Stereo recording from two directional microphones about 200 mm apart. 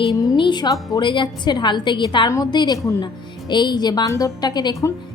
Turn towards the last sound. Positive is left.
turn(degrees=20)  # may be behind; listen again after turning